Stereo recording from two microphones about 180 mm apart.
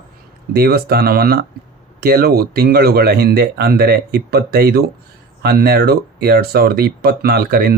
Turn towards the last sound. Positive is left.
turn(degrees=-60)  # may be behind; listen again after turning